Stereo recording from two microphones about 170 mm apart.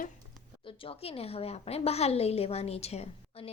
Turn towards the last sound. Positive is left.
turn(degrees=35)  # may be behind; listen again after turning